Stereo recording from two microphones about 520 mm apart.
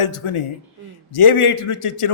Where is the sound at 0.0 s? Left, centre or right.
Left.